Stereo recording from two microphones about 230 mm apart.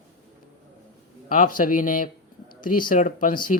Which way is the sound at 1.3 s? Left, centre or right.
Left.